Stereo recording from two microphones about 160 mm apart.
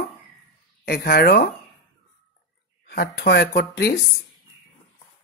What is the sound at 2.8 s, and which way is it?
Speech, 90° left.